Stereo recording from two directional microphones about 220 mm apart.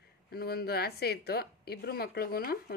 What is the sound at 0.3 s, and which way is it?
A woman's voice, 45° left (ahead or behind).